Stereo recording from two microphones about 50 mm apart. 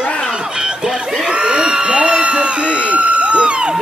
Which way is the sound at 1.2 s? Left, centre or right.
Centre.